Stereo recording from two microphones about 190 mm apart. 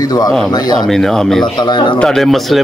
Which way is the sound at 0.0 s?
20° left (ahead or behind).